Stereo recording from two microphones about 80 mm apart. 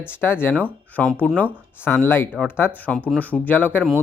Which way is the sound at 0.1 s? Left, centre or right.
Left.